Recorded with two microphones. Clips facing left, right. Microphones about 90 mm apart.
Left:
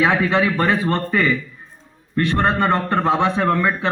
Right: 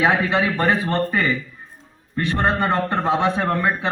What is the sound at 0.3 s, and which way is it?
Speech, 5° right (ahead or behind).